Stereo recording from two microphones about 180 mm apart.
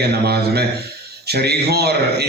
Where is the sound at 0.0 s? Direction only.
65° right (ahead or behind).